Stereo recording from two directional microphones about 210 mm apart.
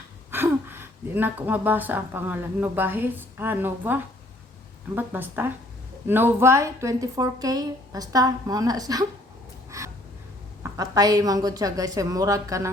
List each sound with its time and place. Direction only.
0.3 s a woman's voice: 10° right (ahead or behind)
9.7 s a sound: 15° right (ahead or behind)
10.6 s a woman's voice: 15° right (ahead or behind)